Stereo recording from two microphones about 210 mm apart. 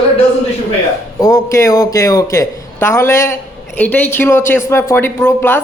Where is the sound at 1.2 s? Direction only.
15° left (ahead or behind).